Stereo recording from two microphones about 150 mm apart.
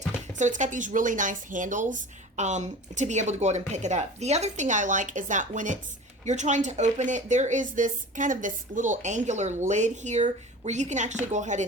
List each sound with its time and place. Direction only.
0.3 s speech: 55° right (ahead or behind)